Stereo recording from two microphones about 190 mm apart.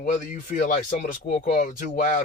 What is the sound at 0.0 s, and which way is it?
Speech, 40° left (ahead or behind).